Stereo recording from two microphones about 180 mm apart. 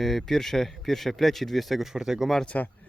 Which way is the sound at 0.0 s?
Centre (ahead or behind).